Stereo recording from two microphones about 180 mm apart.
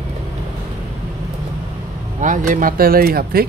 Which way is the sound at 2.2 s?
45° right (ahead or behind).